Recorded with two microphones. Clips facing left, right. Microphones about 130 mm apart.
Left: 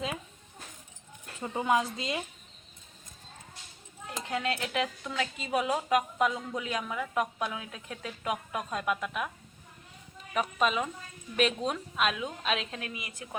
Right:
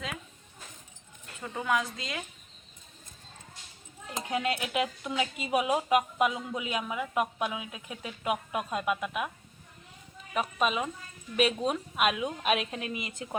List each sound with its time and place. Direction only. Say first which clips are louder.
1.4 s a woman's voice: left 2 dB; 25° left (ahead or behind)
4.3 s speech: right 1 dB; 15° right (ahead or behind)
10.3 s speech: even; 5° right (ahead or behind); by 13.3 s 25° right (ahead or behind)